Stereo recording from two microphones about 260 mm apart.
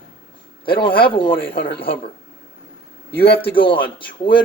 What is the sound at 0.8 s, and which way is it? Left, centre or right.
Speech, centre.